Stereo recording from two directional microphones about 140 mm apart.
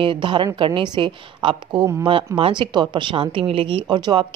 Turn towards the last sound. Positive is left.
turn(degrees=-35)  # may be behind; listen again after turning